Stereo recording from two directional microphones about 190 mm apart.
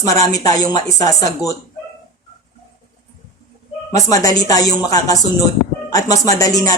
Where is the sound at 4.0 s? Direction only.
20° left (ahead or behind).